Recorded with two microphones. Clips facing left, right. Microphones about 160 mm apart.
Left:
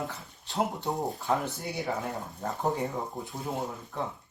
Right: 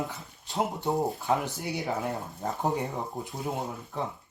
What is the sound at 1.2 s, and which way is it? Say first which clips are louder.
Speech: right 1 dB; 15° right (ahead or behind).